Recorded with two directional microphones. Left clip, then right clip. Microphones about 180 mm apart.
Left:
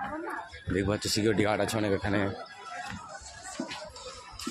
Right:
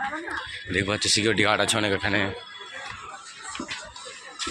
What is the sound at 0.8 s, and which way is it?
Speech, 10° left (ahead or behind).